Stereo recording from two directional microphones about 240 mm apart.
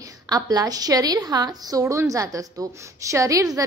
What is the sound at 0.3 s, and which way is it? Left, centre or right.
A woman's voice, centre.